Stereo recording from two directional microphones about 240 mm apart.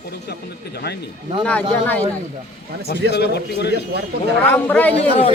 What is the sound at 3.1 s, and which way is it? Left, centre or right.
Speech, left.